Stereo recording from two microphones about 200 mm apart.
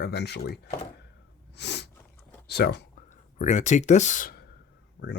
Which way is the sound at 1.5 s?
60° left (ahead or behind).